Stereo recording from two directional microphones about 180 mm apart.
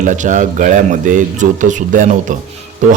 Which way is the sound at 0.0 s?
45° right (ahead or behind).